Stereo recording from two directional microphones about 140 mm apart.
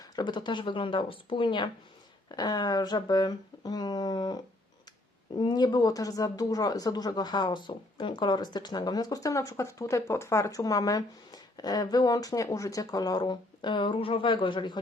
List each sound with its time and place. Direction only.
0.0 s speech: 30° left (ahead or behind)
5.4 s speech: 30° left (ahead or behind)